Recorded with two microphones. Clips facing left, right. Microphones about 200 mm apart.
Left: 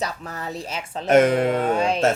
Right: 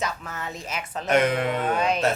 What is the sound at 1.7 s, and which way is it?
Music, 30° left (ahead or behind).